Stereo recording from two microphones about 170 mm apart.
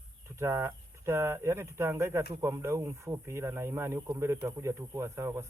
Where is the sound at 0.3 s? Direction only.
15° right (ahead or behind).